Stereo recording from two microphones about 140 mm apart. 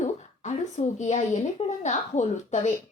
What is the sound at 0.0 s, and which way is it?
A woman's voice, 60° left (ahead or behind).